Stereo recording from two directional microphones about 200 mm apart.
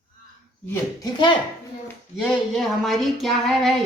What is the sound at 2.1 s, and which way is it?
A woman's voice, centre (ahead or behind).